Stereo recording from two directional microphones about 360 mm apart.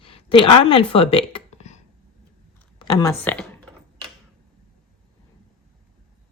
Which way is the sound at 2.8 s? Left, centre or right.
Centre.